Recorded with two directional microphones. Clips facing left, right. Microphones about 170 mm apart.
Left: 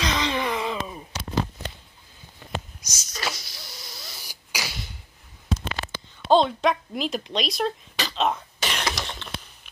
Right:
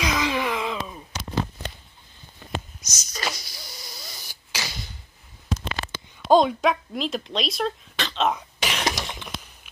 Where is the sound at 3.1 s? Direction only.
Centre (ahead or behind).